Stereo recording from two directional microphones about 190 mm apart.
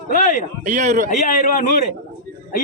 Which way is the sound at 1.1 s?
40° left (ahead or behind).